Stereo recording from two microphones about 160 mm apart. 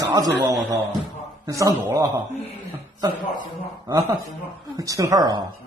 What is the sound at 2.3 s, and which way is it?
Speech, 40° left (ahead or behind).